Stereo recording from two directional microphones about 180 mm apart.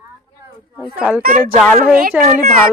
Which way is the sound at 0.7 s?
10° right (ahead or behind).